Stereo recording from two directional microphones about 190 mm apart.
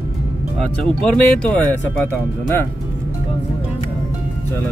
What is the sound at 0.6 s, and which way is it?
Speech, 5° left (ahead or behind).